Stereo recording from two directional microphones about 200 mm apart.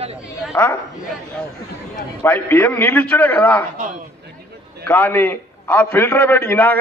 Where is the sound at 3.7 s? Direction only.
40° right (ahead or behind).